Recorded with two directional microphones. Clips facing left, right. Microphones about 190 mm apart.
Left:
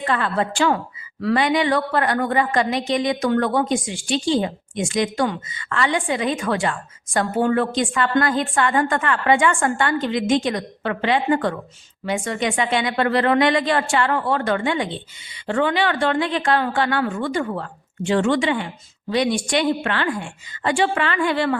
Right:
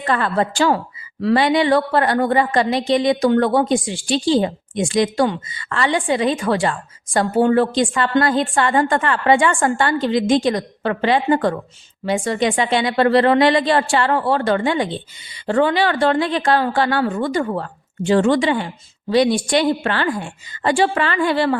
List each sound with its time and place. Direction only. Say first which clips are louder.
0.1 s a woman's voice: right 4 dB; 40° right (ahead or behind)